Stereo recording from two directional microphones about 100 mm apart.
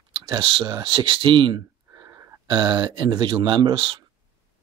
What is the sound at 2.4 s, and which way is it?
Speech, 50° right (ahead or behind).